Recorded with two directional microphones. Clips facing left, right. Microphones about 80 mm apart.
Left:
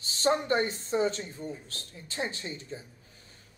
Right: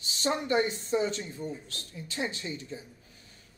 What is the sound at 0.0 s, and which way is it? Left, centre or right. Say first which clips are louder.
A woman's voice: left 3 dB; left.